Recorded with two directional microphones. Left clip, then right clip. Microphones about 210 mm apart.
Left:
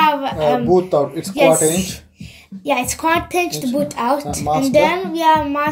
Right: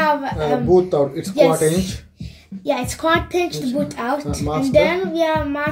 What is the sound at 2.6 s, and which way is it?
A child's voice, 30° left (ahead or behind).